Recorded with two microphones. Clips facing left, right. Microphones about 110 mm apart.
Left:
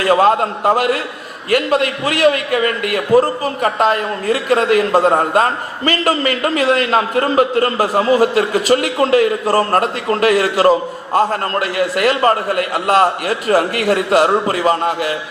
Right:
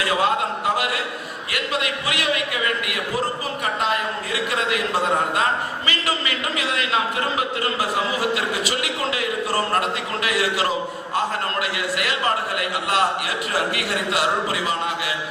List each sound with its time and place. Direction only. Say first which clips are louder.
0.0 s a man's voice: left 8 dB; 45° left (ahead or behind)